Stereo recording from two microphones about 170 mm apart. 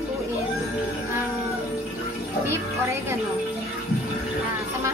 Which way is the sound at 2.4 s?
15° right (ahead or behind).